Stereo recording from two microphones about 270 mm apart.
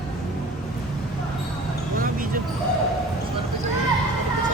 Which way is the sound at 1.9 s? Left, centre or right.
Right.